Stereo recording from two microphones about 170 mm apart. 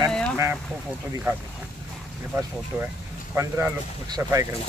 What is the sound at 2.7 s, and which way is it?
Speech, 10° right (ahead or behind).